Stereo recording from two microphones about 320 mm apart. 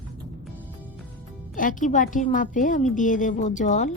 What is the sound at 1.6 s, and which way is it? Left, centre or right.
A woman's voice, left.